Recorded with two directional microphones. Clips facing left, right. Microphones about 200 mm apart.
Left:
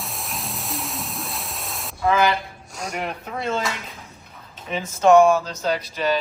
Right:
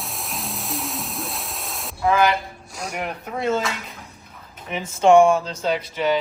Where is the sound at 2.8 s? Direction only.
10° right (ahead or behind).